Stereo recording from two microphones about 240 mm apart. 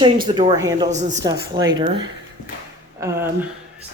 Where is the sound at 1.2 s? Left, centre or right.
Centre.